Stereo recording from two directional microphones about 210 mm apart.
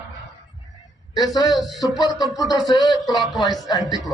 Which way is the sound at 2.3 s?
20° left (ahead or behind).